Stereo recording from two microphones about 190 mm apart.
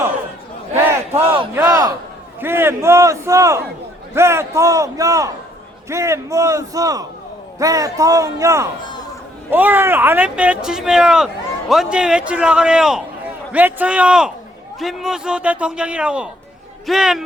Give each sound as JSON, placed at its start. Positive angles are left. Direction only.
{"t": 0.8, "sound": "battle cry", "side_deg": -10}
{"t": 1.5, "sound": "a sound", "side_deg": -20}
{"t": 2.4, "sound": "a man's voice", "side_deg": -10}